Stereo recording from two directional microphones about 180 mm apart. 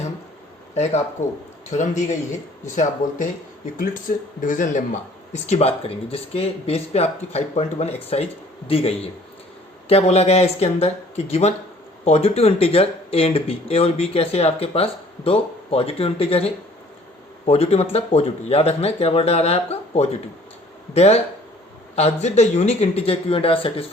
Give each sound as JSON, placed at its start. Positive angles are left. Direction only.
{"t": 0.7, "sound": "speech", "side_deg": 40}
{"t": 5.3, "sound": "speech", "side_deg": 35}